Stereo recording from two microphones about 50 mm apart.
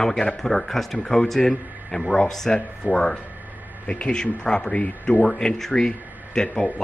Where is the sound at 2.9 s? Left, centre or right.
Left.